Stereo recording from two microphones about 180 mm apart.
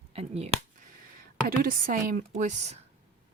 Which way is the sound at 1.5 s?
55° right (ahead or behind).